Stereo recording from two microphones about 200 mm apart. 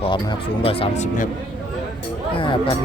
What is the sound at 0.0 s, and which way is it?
Speech, 25° left (ahead or behind).